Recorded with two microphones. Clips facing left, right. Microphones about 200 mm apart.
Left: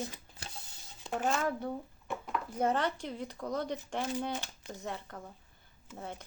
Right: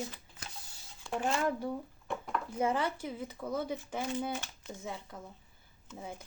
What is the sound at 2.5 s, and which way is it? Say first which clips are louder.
Speech: left 1 dB; 10° right (ahead or behind).